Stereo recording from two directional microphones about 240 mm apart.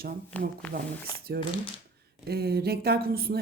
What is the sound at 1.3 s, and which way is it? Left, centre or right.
Speech, right.